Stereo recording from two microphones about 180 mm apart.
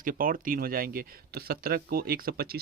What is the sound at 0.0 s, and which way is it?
Speech, 50° right (ahead or behind).